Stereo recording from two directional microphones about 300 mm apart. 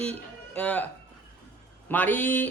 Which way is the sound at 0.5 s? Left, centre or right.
Centre.